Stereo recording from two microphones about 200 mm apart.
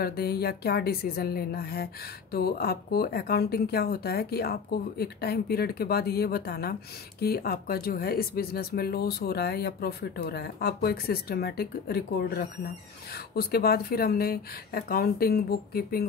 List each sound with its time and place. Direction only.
0.0 s speech: 50° left (ahead or behind)